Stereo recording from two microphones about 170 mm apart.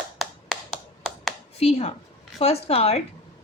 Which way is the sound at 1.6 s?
35° left (ahead or behind).